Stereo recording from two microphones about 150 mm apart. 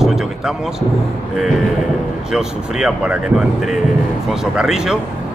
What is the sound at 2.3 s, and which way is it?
Speech, 5° right (ahead or behind).